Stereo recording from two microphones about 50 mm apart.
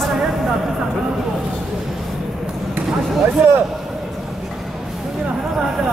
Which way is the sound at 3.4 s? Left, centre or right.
Right.